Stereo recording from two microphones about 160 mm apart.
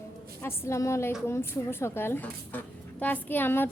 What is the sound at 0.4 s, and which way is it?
A child's voice, 15° left (ahead or behind).